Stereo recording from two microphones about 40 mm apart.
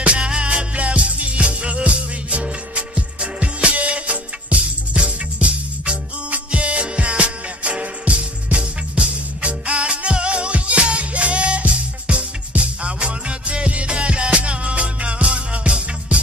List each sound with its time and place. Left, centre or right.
0.0 s music: right